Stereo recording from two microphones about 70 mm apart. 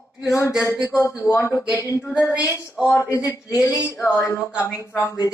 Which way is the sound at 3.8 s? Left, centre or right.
Left.